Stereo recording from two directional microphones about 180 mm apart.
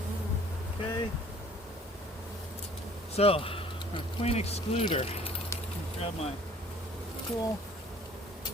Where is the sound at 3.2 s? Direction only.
30° left (ahead or behind).